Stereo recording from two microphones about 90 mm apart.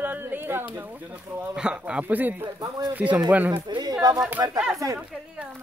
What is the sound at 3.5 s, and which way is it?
Speech, 60° right (ahead or behind).